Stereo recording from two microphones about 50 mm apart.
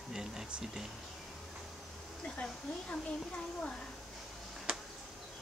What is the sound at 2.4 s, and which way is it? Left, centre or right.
Speech, left.